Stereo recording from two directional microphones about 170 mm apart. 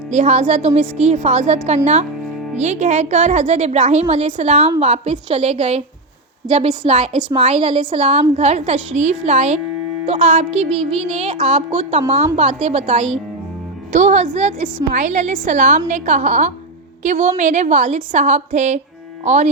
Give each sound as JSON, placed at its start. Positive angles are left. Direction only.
{"t": 0.1, "sound": "a woman's voice", "side_deg": -40}